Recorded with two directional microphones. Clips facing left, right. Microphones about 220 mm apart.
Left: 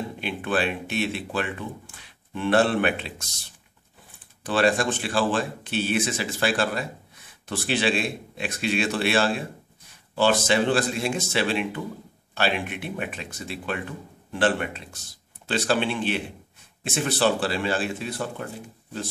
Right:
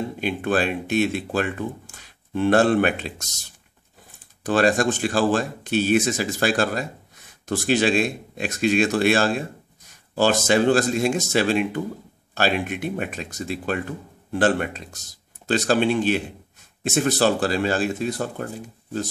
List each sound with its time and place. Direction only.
0.2 s speech: 45° right (ahead or behind)